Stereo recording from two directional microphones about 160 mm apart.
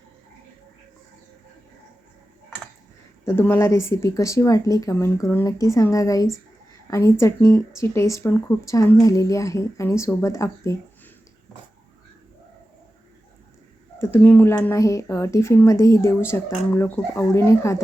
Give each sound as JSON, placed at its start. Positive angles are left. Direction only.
{"t": 3.2, "sound": "speech", "side_deg": 15}
{"t": 14.0, "sound": "speech", "side_deg": 15}